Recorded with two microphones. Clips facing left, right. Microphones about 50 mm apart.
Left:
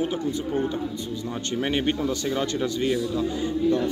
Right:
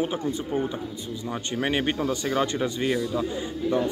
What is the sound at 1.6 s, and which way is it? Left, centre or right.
Speech, centre.